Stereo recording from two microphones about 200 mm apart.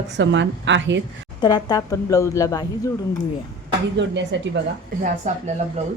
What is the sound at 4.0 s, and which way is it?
Speech, 65° right (ahead or behind).